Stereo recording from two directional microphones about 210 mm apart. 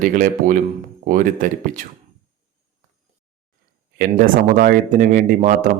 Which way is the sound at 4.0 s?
40° right (ahead or behind).